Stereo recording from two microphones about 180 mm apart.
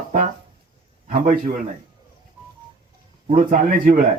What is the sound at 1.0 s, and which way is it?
Speech, 50° right (ahead or behind).